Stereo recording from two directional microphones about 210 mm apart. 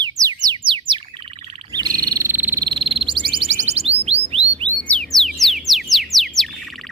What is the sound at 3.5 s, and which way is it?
Alarm, 30° right (ahead or behind).